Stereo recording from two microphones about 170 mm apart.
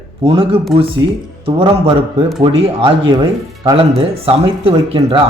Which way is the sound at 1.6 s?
35° right (ahead or behind).